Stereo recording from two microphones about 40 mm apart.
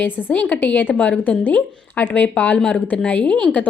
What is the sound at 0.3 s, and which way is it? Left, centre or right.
A woman's voice, left.